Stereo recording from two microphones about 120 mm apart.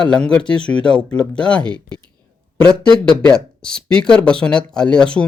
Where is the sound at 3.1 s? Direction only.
5° left (ahead or behind).